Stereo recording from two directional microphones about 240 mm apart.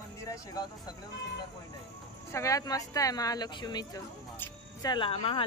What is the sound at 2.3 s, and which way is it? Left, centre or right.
Speech, centre.